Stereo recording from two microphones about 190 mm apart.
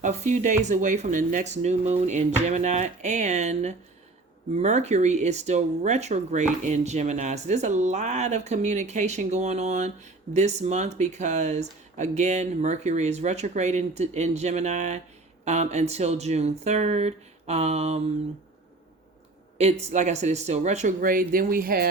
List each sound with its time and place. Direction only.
0.0 s speech: 40° right (ahead or behind)
19.9 s speech: 40° right (ahead or behind)